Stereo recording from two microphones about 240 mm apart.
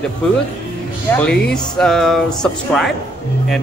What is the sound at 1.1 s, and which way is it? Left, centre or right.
Speech, centre.